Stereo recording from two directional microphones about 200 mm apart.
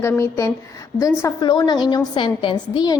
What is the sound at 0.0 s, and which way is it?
A woman's voice, 15° left (ahead or behind).